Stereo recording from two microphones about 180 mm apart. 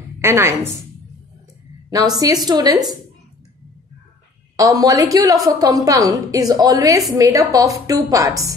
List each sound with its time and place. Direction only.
0.2 s a woman's voice: 15° right (ahead or behind)
1.9 s a woman's voice: 20° right (ahead or behind)
4.6 s a woman's voice: 20° right (ahead or behind)